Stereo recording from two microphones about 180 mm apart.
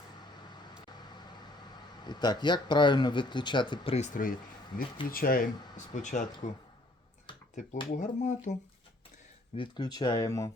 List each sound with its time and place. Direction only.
2.0 s speech: 25° left (ahead or behind); by 6.5 s 45° left (ahead or behind)
7.9 s speech: 45° left (ahead or behind)
9.6 s speech: 25° left (ahead or behind)